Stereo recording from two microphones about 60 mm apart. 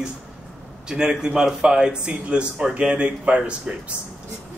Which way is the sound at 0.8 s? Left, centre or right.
Centre.